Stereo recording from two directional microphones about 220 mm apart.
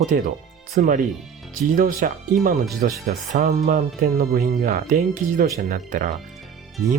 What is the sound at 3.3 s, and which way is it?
Speech, 40° right (ahead or behind).